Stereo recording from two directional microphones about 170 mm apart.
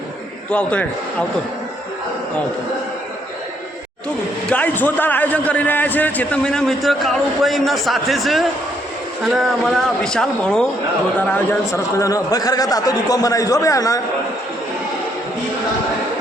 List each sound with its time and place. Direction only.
0.5 s a man's voice: 10° left (ahead or behind)
4.4 s a man's voice: 10° left (ahead or behind)